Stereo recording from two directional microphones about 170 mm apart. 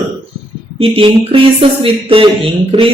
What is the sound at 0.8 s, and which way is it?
Speech, 35° right (ahead or behind).